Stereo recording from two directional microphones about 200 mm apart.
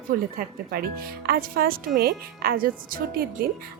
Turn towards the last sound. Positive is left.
turn(degrees=-45)  # may be behind; listen again after turning